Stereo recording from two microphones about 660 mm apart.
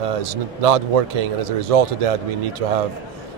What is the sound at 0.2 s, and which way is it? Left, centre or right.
Speech, right.